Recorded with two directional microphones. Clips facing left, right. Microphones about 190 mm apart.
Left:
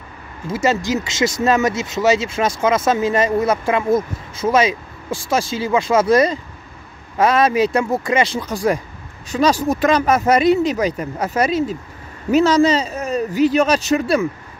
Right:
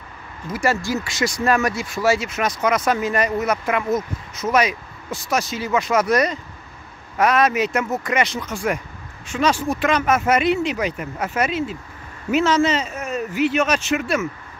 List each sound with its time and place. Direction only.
0.5 s speech: 20° left (ahead or behind)